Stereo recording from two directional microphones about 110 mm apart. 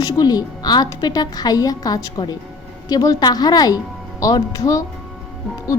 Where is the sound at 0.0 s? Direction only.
35° left (ahead or behind).